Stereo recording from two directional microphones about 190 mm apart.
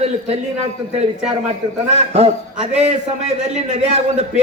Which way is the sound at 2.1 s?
35° right (ahead or behind).